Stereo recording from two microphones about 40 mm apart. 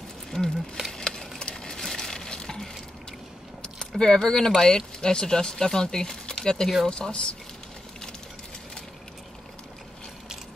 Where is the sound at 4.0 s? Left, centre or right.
Centre.